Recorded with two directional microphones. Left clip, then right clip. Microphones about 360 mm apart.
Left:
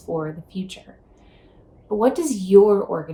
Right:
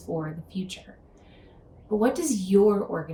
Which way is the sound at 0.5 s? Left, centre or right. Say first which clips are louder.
Left 3 dB; centre.